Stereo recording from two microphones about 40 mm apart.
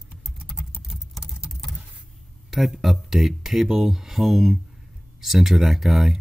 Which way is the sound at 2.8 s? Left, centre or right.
Centre.